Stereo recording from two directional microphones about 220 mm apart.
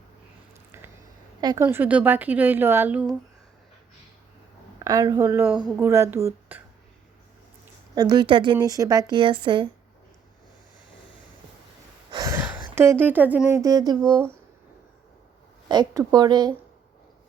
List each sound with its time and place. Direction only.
0.7 s a sound: 10° right (ahead or behind)
1.4 s a woman's voice: 20° right (ahead or behind)
1.6 s speech: 10° right (ahead or behind)
4.8 s speech: 15° right (ahead or behind)
7.9 s a woman's voice: 20° right (ahead or behind)
12.1 s a sound: 15° right (ahead or behind)
12.7 s speech: 10° right (ahead or behind)
15.7 s a woman's voice: 20° right (ahead or behind)